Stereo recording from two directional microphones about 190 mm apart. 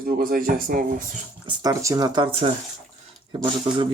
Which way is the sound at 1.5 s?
20° right (ahead or behind).